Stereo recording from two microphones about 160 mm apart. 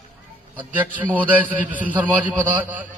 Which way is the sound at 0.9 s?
10° right (ahead or behind).